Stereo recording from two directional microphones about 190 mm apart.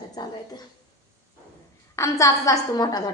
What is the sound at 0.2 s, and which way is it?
Speech, 20° left (ahead or behind).